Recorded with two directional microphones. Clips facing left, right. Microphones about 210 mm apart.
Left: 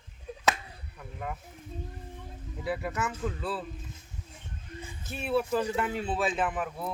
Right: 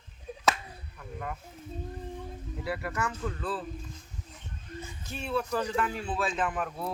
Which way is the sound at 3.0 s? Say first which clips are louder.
Left 1 dB; 15° left (ahead or behind).